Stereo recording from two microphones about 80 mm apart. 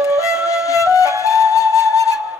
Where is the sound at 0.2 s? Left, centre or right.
Left.